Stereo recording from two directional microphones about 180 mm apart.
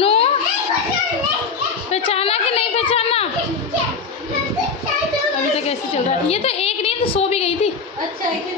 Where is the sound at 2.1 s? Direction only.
35° left (ahead or behind).